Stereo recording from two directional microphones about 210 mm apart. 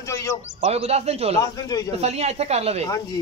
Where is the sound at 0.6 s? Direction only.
30° right (ahead or behind).